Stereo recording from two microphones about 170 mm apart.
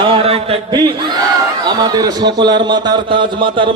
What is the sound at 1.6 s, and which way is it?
A man's voice, 25° right (ahead or behind).